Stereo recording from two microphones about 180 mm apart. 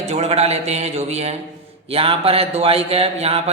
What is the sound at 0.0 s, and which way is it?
Speech, 35° right (ahead or behind).